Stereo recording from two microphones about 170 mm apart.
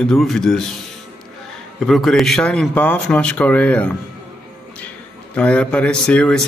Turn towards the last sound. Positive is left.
turn(degrees=5)  # may be behind; listen again after turning